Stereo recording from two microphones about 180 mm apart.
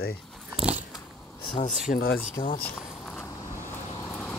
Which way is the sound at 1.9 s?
55° left (ahead or behind).